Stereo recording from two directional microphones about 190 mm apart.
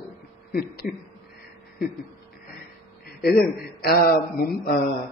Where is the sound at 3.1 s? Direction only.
55° left (ahead or behind).